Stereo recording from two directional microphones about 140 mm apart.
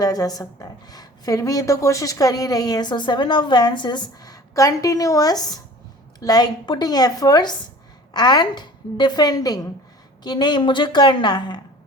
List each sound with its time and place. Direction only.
0.0 s a woman's voice: 25° left (ahead or behind)